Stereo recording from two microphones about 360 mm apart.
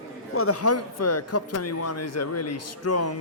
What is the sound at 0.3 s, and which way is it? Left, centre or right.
Speech, left.